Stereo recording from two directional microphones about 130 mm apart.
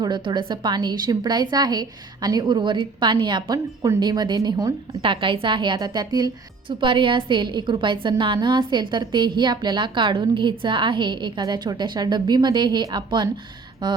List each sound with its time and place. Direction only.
0.0 s a woman's voice: 35° right (ahead or behind)
5.0 s a woman's voice: 40° right (ahead or behind)